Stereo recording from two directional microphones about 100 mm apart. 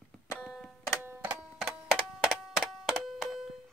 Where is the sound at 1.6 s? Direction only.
5° right (ahead or behind).